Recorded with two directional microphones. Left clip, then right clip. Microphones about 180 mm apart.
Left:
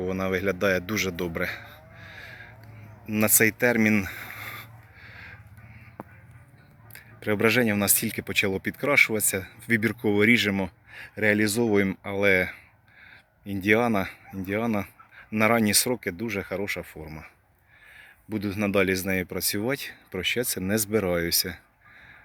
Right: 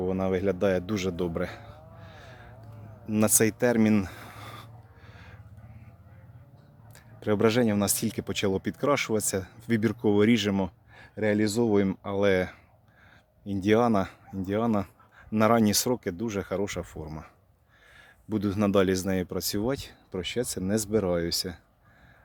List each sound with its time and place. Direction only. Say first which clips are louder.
0.0 s speech: even; 5° right (ahead or behind)
3.1 s a sound: left 2 dB; 5° right (ahead or behind)
6.9 s speech: even; 5° right (ahead or behind)